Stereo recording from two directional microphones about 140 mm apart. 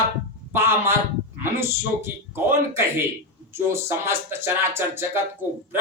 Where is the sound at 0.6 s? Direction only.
20° right (ahead or behind).